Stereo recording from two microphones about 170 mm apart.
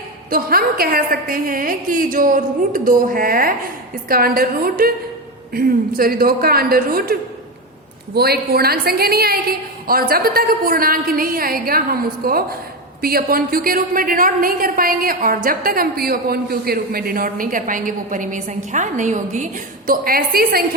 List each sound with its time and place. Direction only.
0.3 s a woman's voice: 60° right (ahead or behind)
19.9 s a woman's voice: 60° right (ahead or behind)